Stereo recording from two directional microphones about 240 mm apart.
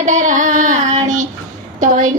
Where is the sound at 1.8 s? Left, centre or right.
Right.